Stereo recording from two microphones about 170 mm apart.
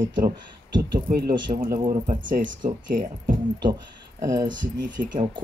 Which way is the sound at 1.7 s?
25° right (ahead or behind).